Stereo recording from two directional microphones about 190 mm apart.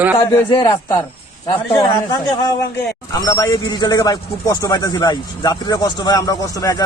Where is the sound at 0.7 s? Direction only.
30° left (ahead or behind).